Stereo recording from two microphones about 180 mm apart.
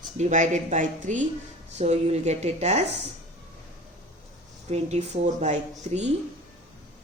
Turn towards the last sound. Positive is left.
turn(degrees=-40)  # may be behind; listen again after turning